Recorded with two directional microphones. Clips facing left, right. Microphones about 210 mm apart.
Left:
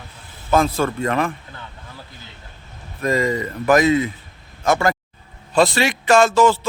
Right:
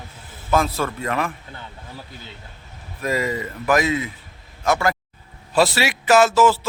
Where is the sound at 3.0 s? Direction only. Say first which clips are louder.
Left 4 dB; 5° right (ahead or behind).